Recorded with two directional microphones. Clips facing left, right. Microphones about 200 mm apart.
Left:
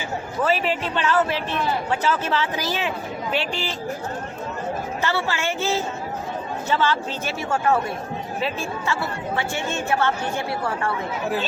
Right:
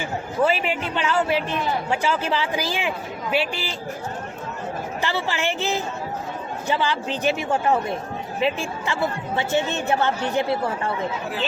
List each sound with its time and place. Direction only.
0.4 s a man's voice: 10° right (ahead or behind)
5.0 s a man's voice: 15° right (ahead or behind)